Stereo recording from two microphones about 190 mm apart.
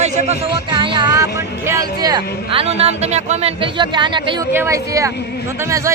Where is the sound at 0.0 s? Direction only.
35° right (ahead or behind).